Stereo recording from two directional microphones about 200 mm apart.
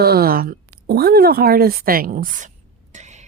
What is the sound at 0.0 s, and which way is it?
A woman's voice, 50° right (ahead or behind).